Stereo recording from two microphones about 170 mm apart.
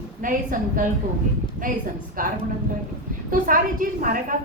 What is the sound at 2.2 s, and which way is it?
A woman's voice, 55° right (ahead or behind).